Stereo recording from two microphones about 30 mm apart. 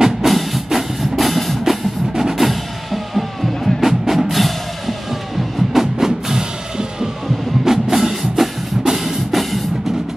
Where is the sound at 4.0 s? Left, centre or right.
Centre.